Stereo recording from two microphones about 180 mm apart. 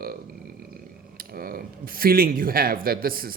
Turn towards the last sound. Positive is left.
turn(degrees=-55)  # may be behind; listen again after turning